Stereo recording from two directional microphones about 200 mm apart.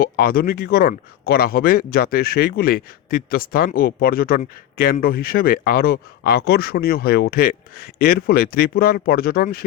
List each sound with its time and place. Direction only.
0.0 s speech: 50° left (ahead or behind)